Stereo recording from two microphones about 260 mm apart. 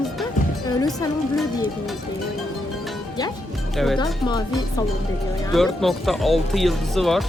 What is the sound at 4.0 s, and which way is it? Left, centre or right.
Speech, centre.